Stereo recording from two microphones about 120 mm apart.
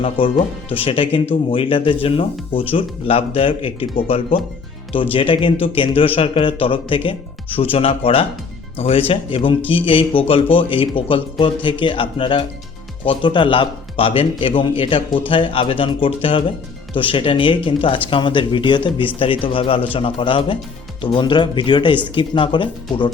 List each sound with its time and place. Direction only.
0.2 s speech: 50° left (ahead or behind)